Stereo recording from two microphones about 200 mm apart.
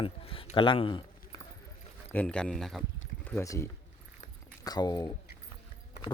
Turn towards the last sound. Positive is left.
turn(degrees=20)  # may be behind; listen again after turning